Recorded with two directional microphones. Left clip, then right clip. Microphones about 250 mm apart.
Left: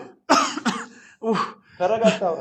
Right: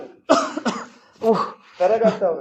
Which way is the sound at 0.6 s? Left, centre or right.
Left.